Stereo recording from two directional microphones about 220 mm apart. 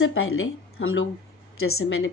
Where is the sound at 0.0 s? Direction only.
65° left (ahead or behind).